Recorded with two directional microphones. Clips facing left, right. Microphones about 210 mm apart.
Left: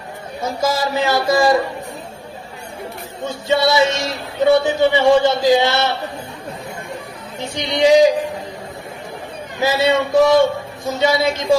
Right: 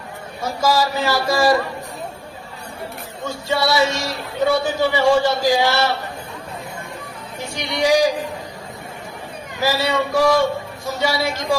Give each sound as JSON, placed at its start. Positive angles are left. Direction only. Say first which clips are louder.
{"t": 0.6, "sound": "a man's voice", "louder": "even", "side_deg": 20}
{"t": 3.2, "sound": "a man's voice", "louder": "left 4 dB", "side_deg": 20}
{"t": 7.3, "sound": "a man's voice", "louder": "left 4 dB", "side_deg": 20}
{"t": 9.6, "sound": "a man's voice", "louder": "left 4 dB", "side_deg": 20}